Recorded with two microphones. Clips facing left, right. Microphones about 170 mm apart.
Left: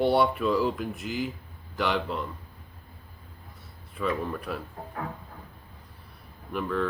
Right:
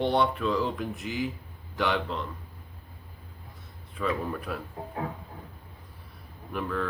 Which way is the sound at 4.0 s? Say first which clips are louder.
Left 1 dB; centre (ahead or behind).